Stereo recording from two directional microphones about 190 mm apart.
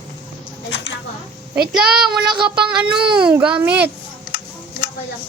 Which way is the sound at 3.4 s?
5° right (ahead or behind).